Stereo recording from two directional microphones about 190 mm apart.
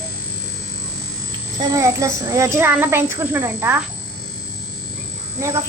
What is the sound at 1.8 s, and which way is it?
A child's voice, 15° right (ahead or behind).